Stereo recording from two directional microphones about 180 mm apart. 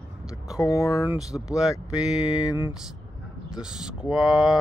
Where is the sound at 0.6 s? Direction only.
15° left (ahead or behind).